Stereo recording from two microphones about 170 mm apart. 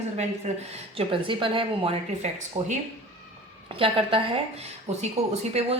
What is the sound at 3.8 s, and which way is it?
A woman's voice, 30° right (ahead or behind).